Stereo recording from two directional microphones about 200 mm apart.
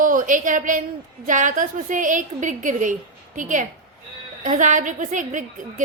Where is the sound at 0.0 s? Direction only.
40° right (ahead or behind).